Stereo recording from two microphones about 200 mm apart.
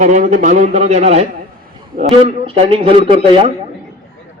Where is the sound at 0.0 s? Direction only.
40° right (ahead or behind).